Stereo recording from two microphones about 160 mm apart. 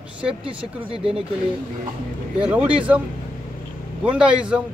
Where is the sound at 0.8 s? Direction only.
35° right (ahead or behind).